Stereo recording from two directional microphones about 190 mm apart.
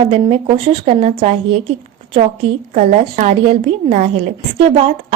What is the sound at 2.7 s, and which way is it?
A woman's voice, 35° right (ahead or behind).